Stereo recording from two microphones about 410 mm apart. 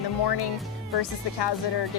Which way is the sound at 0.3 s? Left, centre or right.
Left.